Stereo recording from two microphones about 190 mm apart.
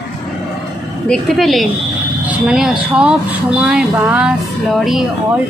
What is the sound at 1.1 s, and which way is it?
Speech, centre (ahead or behind).